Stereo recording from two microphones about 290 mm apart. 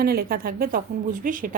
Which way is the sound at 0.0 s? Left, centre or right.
Right.